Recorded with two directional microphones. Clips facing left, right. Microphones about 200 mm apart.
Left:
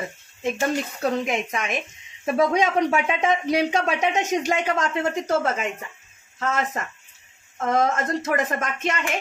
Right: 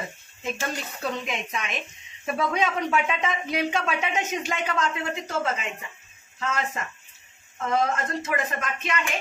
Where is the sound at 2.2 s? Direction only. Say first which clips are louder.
Left 5 dB; 40° left (ahead or behind).